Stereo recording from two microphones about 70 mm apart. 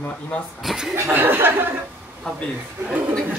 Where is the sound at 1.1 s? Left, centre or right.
Right.